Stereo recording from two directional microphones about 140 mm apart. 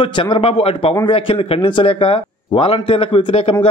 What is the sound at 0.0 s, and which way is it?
A man's voice, 35° left (ahead or behind).